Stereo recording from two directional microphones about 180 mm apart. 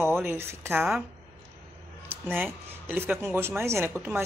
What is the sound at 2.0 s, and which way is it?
A woman's voice, 10° right (ahead or behind).